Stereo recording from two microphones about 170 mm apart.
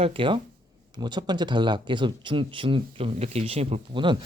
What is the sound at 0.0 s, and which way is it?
Speech, 30° right (ahead or behind).